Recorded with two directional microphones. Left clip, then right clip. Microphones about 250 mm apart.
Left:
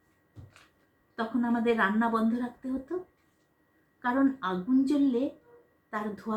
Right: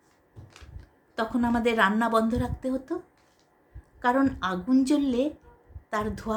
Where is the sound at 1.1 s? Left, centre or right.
Right.